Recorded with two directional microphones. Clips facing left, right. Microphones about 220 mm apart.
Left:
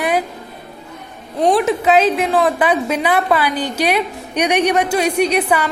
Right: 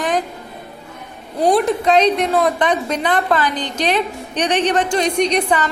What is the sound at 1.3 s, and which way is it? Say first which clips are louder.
A woman's voice: even; centre (ahead or behind).